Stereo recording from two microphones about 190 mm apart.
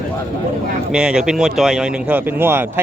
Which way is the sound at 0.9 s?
5° right (ahead or behind).